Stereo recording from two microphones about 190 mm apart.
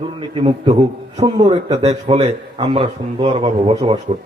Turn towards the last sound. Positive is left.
turn(degrees=-30)  # may be behind; listen again after turning